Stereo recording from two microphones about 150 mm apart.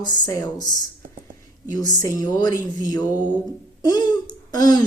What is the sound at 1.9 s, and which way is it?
Speech, 25° left (ahead or behind).